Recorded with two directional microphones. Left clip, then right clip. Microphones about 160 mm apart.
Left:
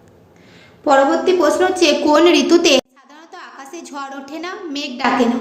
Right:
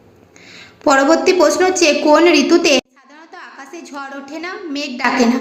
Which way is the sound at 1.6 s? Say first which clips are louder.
Right 1 dB; 5° right (ahead or behind).